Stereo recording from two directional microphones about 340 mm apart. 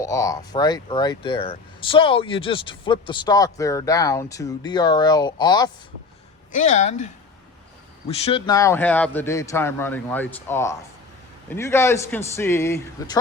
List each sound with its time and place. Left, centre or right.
0.0 s speech: centre